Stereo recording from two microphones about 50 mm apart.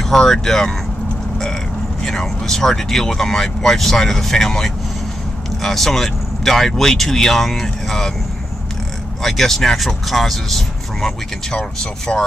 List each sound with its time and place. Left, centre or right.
0.1 s speech: centre
2.0 s speech: centre
9.2 s speech: centre
11.5 s speech: centre